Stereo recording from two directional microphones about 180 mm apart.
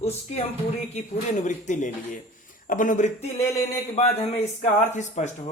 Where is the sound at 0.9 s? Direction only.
40° left (ahead or behind).